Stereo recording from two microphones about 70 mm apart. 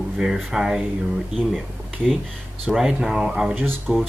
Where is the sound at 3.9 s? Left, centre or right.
Right.